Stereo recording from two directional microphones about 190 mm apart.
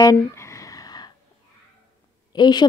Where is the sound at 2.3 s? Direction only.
25° left (ahead or behind).